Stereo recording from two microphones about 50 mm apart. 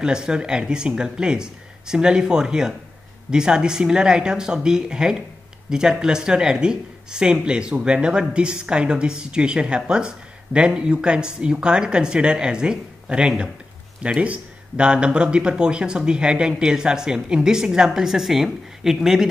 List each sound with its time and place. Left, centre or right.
0.0 s speech: centre